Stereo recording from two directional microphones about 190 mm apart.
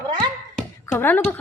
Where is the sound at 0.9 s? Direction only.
10° left (ahead or behind).